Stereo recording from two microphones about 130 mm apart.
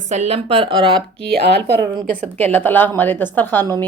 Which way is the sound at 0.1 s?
55° right (ahead or behind).